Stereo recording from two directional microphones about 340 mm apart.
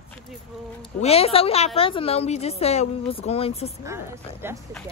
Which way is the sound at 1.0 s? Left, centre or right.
Centre.